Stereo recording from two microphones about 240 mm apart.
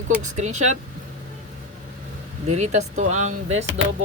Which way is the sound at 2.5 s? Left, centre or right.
Right.